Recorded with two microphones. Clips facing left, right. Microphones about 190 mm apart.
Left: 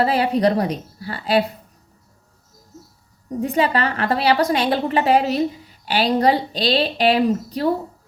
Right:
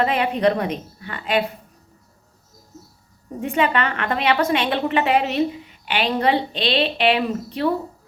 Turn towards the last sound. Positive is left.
turn(degrees=40)  # may be behind; listen again after turning